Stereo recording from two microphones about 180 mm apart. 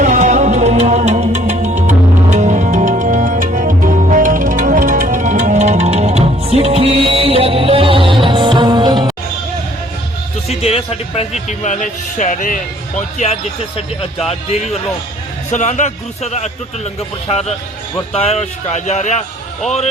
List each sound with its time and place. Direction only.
0.0 s music: 45° right (ahead or behind); by 9.1 s 25° right (ahead or behind)
10.5 s a man's voice: 35° left (ahead or behind)